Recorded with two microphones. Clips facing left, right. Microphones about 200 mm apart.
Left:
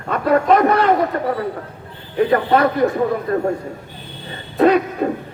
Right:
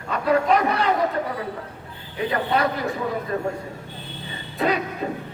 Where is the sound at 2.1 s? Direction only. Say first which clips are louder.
Left 8 dB; 50° left (ahead or behind).